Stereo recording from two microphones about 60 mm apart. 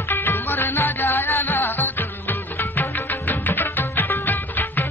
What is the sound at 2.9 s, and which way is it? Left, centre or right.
Music of bollywood, left.